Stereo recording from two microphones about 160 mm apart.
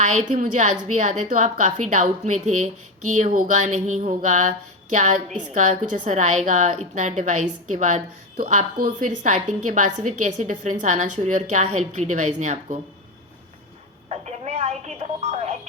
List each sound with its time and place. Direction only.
0.0 s a woman's voice: 50° right (ahead or behind)
14.1 s telephone: 45° right (ahead or behind)